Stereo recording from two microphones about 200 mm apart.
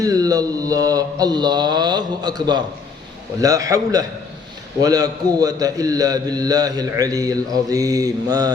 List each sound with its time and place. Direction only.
0.0 s mantra: 15° right (ahead or behind)
3.4 s a man's voice: 15° right (ahead or behind)